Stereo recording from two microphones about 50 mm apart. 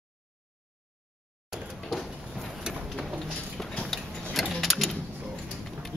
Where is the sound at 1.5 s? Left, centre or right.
Centre.